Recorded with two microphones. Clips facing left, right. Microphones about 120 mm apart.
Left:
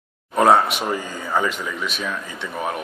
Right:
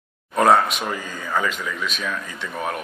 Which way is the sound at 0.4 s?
5° left (ahead or behind).